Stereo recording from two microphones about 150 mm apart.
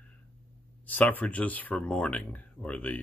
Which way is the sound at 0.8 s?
10° left (ahead or behind).